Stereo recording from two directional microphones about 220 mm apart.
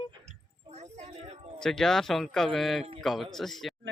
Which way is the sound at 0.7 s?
30° right (ahead or behind).